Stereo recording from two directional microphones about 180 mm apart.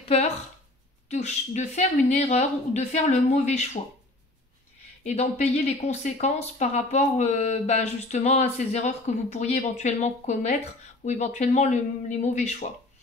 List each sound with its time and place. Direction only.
0.0 s a sound: 35° left (ahead or behind)
1.1 s speech: 40° left (ahead or behind)
5.0 s speech: 35° left (ahead or behind)